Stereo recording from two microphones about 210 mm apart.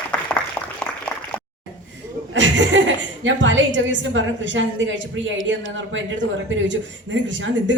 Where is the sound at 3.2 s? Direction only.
60° right (ahead or behind).